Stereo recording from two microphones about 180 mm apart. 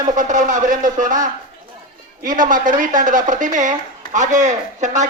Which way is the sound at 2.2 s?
45° right (ahead or behind).